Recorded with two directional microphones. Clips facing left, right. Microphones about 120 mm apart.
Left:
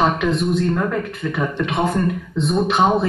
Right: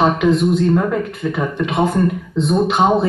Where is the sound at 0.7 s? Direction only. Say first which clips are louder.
Right 4 dB; 10° right (ahead or behind).